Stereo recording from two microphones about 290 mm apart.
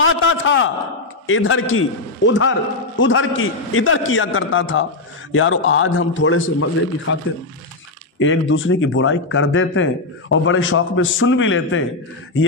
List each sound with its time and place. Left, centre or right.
0.0 s a man's voice: left
8.2 s speech: left